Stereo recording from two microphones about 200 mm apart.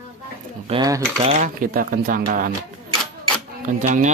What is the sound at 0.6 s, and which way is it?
Speech, 25° right (ahead or behind).